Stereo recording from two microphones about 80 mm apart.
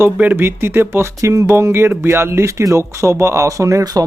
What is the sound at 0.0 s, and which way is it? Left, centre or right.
Speech, right.